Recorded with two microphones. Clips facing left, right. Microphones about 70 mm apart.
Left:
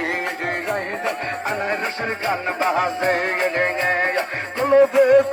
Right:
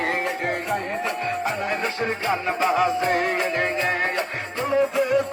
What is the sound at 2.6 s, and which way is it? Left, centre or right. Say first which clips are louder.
Music: left 1 dB; left.